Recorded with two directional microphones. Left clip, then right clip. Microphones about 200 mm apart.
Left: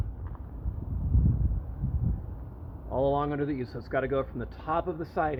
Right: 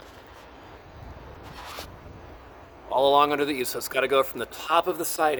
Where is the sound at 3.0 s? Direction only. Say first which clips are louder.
Right 8 dB; 40° right (ahead or behind).